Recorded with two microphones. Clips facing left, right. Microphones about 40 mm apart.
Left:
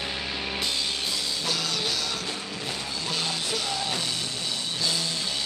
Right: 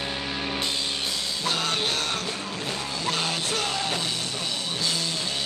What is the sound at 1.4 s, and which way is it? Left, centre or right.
Music, right.